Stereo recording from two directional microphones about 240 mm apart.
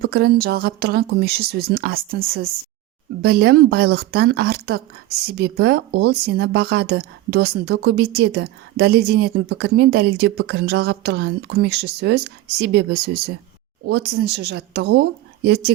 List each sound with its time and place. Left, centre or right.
0.0 s speech: right